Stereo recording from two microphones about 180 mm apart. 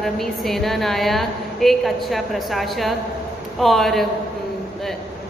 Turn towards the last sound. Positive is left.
turn(degrees=0)  # may be behind; listen again after turning